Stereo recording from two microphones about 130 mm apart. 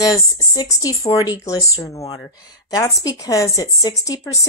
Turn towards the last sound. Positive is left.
turn(degrees=25)  # may be behind; listen again after turning